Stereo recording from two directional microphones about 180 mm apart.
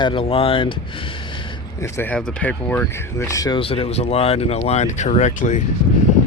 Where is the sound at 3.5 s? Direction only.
30° left (ahead or behind).